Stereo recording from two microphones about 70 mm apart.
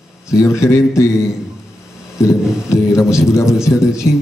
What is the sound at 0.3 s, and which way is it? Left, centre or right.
Speech, left.